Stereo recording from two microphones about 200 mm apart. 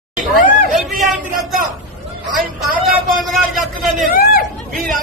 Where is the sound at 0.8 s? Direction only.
Centre (ahead or behind).